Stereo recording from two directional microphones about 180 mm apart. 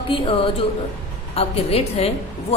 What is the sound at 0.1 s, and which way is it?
Speech, 30° left (ahead or behind).